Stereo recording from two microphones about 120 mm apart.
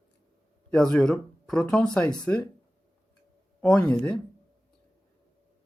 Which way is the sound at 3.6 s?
5° left (ahead or behind).